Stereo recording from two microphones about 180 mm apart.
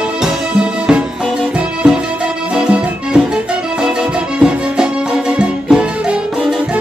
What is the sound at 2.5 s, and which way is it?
Music, 5° right (ahead or behind).